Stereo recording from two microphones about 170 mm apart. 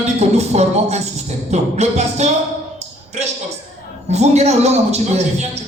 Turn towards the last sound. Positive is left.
turn(degrees=-40)  # may be behind; listen again after turning